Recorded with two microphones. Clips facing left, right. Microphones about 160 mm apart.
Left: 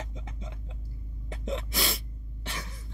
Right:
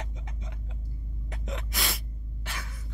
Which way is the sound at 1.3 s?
25° left (ahead or behind).